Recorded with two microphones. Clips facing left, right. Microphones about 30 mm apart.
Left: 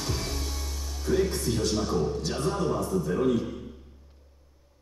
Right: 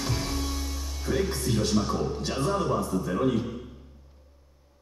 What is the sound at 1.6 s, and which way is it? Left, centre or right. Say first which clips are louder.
A man's voice: left 1 dB; centre.